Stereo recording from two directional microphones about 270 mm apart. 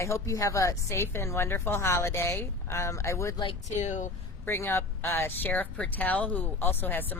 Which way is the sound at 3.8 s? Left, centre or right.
Left.